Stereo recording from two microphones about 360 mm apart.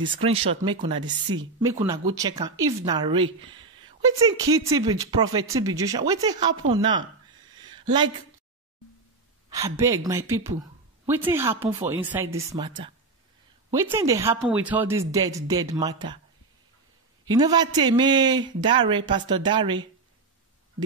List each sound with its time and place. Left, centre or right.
0.0 s speech: centre
7.6 s a sound: centre
9.5 s speech: centre
17.3 s speech: centre